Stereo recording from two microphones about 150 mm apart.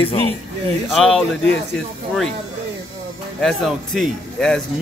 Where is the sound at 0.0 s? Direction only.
40° left (ahead or behind).